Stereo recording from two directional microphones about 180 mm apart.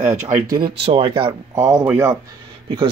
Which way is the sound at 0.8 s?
30° right (ahead or behind).